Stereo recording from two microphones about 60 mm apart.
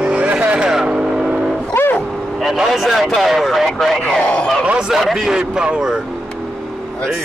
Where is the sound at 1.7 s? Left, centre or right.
Left.